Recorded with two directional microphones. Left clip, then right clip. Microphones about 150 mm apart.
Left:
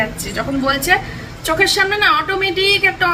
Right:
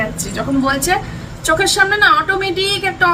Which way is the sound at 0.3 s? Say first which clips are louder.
Right 1 dB; 10° right (ahead or behind).